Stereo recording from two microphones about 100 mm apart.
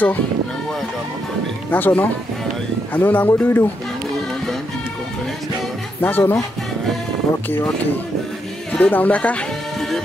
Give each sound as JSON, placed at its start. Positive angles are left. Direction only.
{"t": 1.7, "sound": "speech", "side_deg": 15}
{"t": 5.9, "sound": "speech", "side_deg": 20}
{"t": 8.7, "sound": "speech", "side_deg": 15}